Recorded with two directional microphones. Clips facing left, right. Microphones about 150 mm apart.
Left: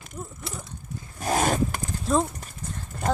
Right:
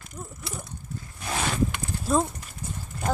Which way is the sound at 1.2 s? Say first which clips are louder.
Left 4 dB; 45° left (ahead or behind).